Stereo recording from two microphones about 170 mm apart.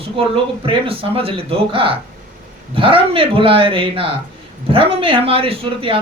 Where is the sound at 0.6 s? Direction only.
30° right (ahead or behind).